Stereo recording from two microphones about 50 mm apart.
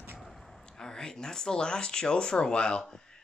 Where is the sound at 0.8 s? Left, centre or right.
Centre.